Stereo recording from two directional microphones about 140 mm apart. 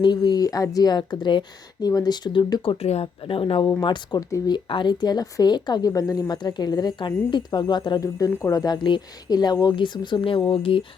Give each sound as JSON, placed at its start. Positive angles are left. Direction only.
{"t": 0.0, "sound": "speech", "side_deg": 30}